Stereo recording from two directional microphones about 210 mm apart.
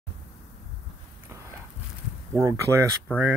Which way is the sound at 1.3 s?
10° right (ahead or behind).